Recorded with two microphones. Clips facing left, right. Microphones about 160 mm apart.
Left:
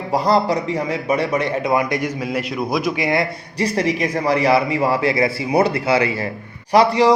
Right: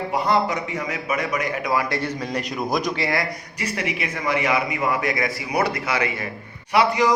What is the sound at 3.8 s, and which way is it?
A man's voice, 35° left (ahead or behind).